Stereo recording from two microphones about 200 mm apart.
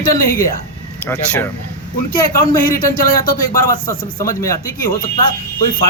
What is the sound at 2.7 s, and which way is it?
Speech, 45° left (ahead or behind).